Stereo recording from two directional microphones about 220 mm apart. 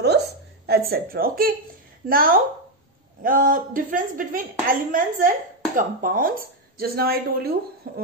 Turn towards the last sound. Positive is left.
turn(degrees=-45)  # may be behind; listen again after turning